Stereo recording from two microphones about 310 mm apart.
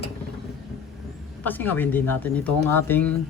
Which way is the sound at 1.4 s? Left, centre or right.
Centre.